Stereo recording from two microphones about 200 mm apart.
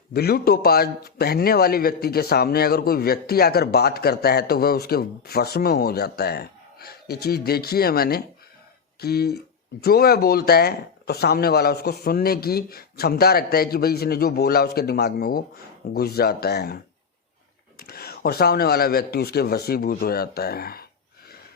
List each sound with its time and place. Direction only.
0.1 s a man's voice: 50° left (ahead or behind)